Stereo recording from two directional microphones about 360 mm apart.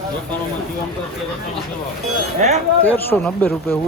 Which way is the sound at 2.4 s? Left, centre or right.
Centre.